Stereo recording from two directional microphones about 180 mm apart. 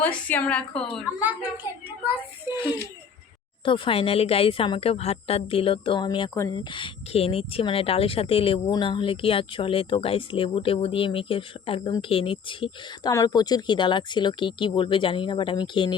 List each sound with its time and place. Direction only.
0.0 s a woman's voice: 10° left (ahead or behind)
3.7 s a woman's voice: 30° left (ahead or behind)
6.7 s speech: 30° left (ahead or behind)